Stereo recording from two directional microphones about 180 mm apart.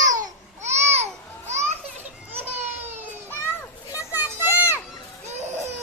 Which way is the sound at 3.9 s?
15° left (ahead or behind).